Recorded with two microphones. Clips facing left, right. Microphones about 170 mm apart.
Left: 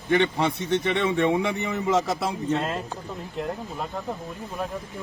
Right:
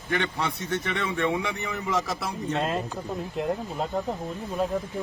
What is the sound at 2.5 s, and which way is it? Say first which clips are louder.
Speech: even; 20° right (ahead or behind).